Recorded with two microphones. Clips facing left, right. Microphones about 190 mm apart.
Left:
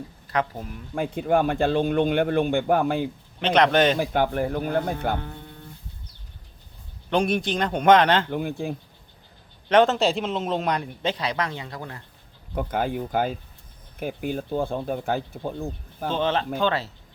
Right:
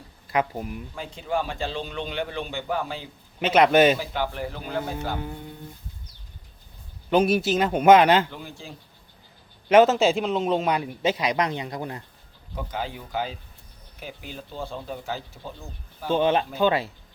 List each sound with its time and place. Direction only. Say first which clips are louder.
0.3 s a man's voice: right 1 dB; 10° right (ahead or behind)
0.9 s a man's voice: left 7 dB; 55° left (ahead or behind)
3.4 s a man's voice: right 2 dB; 10° right (ahead or behind)
3.9 s speech: left 6 dB; 50° left (ahead or behind)
7.1 s speech: right 3 dB; 5° right (ahead or behind)
8.3 s a man's voice: left 12 dB; 55° left (ahead or behind)
9.6 s a man's voice: right 2 dB; 5° right (ahead or behind)
12.5 s speech: left 6 dB; 55° left (ahead or behind)
16.0 s a man's voice: right 2 dB; 10° right (ahead or behind)